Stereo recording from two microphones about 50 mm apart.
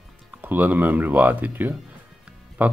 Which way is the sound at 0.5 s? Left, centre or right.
Right.